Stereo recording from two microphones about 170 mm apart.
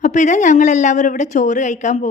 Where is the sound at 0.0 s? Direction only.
45° left (ahead or behind).